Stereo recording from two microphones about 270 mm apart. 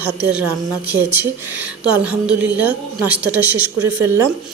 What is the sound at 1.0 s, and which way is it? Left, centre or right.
A woman's voice, centre.